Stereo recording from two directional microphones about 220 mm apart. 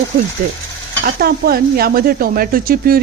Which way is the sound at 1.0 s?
45° right (ahead or behind).